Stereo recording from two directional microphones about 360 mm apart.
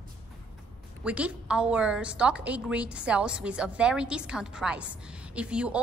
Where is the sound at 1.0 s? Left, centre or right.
Centre.